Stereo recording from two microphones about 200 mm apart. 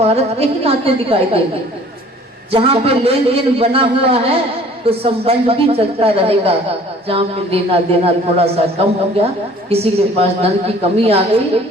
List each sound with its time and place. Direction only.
0.0 s a man's voice: 30° right (ahead or behind)
2.5 s a man's voice: 30° right (ahead or behind)
9.6 s a man's voice: 30° right (ahead or behind)